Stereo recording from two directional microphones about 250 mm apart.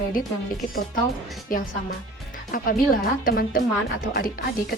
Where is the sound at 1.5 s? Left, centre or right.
Left.